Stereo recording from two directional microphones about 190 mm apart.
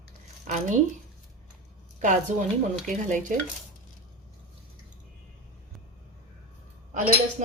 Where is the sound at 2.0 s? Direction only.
40° right (ahead or behind).